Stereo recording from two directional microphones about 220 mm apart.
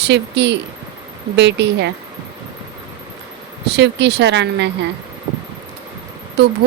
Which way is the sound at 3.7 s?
50° right (ahead or behind).